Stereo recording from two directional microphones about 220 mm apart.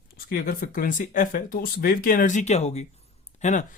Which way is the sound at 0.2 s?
40° left (ahead or behind).